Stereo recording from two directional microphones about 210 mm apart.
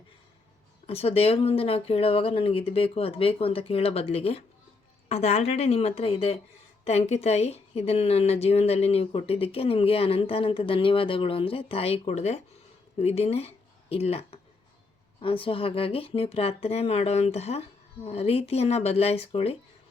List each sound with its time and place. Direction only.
0.9 s speech: 30° left (ahead or behind)